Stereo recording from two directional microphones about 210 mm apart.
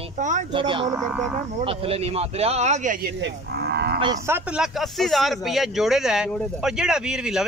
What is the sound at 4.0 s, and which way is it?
Speech, 15° right (ahead or behind).